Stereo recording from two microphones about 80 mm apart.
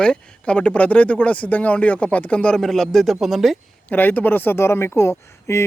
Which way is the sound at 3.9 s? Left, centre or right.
Left.